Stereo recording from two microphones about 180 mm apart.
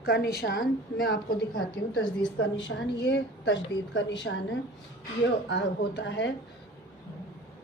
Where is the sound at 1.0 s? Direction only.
80° left.